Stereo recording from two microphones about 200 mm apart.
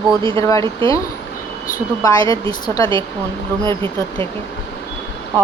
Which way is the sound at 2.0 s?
15° left (ahead or behind).